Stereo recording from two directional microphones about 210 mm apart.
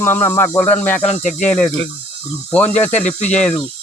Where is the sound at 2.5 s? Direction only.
5° left (ahead or behind).